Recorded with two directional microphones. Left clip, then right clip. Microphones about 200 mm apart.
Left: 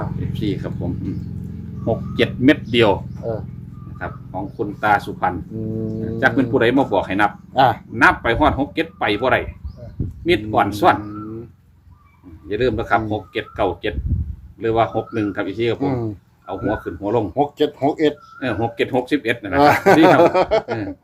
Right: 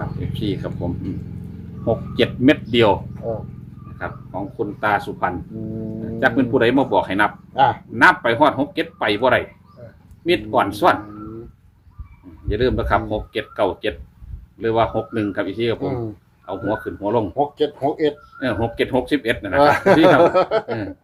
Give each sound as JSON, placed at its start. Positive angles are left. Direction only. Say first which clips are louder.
{"t": 0.3, "sound": "speech", "louder": "even", "side_deg": -15}
{"t": 3.2, "sound": "speech", "louder": "left 1 dB", "side_deg": 45}
{"t": 3.9, "sound": "speech", "louder": "even", "side_deg": -15}
{"t": 5.5, "sound": "speech", "louder": "left 3 dB", "side_deg": 45}
{"t": 6.1, "sound": "speech", "louder": "even", "side_deg": -10}
{"t": 7.5, "sound": "speech", "louder": "left 1 dB", "side_deg": 50}
{"t": 7.9, "sound": "speech", "louder": "right 3 dB", "side_deg": -15}
{"t": 12.5, "sound": "speech", "louder": "left 1 dB", "side_deg": -15}
{"t": 17.3, "sound": "speech", "louder": "left 1 dB", "side_deg": 50}
{"t": 18.3, "sound": "speech", "louder": "even", "side_deg": -15}
{"t": 19.5, "sound": "speech", "louder": "left 1 dB", "side_deg": 50}